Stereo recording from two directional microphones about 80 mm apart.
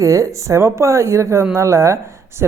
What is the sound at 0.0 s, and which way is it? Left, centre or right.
Speech, right.